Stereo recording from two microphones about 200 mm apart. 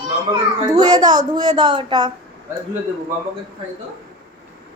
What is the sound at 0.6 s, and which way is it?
A woman's voice, 20° right (ahead or behind).